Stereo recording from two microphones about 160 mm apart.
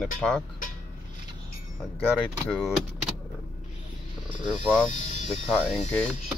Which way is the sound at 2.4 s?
Centre (ahead or behind).